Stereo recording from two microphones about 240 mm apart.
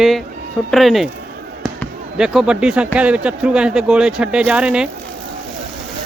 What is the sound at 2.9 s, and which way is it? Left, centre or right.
Speech, centre.